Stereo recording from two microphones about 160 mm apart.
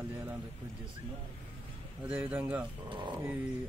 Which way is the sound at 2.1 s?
10° right (ahead or behind).